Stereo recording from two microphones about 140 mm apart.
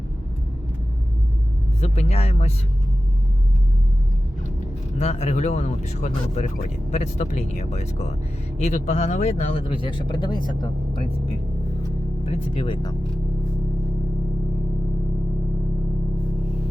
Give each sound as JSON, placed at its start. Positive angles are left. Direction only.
{"t": 1.8, "sound": "speech", "side_deg": 50}
{"t": 4.9, "sound": "speech", "side_deg": 55}
{"t": 12.5, "sound": "speech", "side_deg": 35}